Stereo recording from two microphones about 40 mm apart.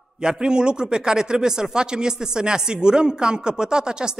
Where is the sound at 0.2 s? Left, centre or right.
Right.